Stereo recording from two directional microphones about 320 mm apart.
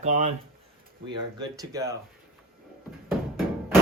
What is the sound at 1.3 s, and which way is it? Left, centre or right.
Speech, centre.